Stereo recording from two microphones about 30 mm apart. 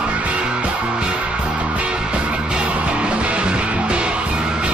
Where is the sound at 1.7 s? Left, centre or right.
Right.